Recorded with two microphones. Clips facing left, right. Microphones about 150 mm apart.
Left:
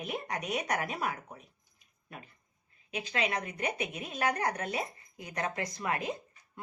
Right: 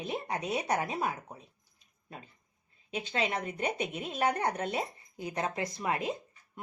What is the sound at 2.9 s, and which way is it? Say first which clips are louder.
A woman's voice: right 1 dB; 30° right (ahead or behind).